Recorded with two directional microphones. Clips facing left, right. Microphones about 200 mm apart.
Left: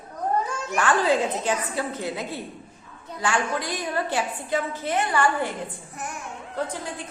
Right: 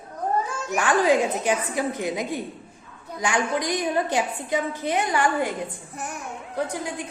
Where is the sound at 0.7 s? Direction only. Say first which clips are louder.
Right 2 dB; 15° right (ahead or behind).